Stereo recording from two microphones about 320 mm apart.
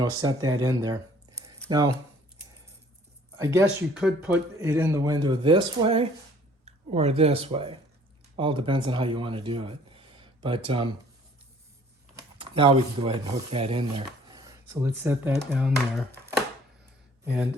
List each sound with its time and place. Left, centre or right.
0.0 s a man's voice: centre
3.3 s a man's voice: centre
12.4 s speech: centre